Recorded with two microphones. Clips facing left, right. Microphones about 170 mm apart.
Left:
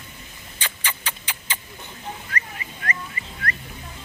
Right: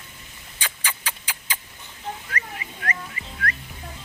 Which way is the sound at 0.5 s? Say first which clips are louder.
Even; 10° right (ahead or behind).